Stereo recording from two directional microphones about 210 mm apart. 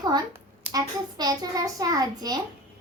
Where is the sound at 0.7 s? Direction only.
20° right (ahead or behind).